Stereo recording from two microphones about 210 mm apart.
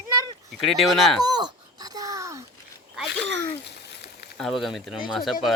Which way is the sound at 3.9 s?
50° left (ahead or behind).